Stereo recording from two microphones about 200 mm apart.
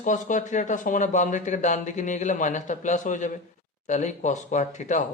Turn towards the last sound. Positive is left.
turn(degrees=35)  # may be behind; listen again after turning